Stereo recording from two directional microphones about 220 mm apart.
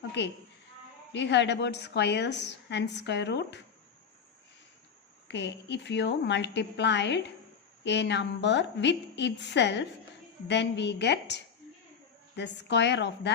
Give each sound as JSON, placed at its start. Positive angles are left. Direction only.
{"t": 0.2, "sound": "a woman's voice", "side_deg": 50}
{"t": 5.3, "sound": "a woman's voice", "side_deg": 50}